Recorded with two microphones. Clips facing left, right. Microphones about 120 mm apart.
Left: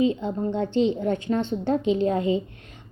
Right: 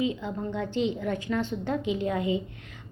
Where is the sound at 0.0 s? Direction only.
30° left (ahead or behind).